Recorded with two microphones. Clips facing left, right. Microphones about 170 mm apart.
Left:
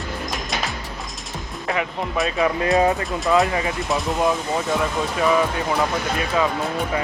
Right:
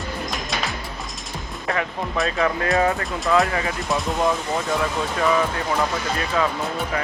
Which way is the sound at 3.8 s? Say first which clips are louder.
Even; centre (ahead or behind).